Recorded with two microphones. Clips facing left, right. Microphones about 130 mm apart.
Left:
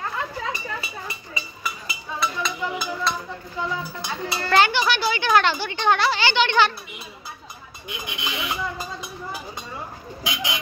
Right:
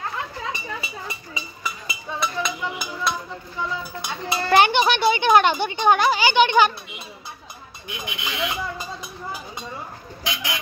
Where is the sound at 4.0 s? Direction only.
15° right (ahead or behind).